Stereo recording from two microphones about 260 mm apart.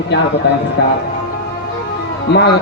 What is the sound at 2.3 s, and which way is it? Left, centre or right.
Speech, left.